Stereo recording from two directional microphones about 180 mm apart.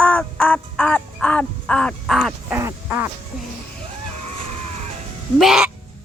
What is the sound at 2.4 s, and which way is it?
Quack, 10° right (ahead or behind).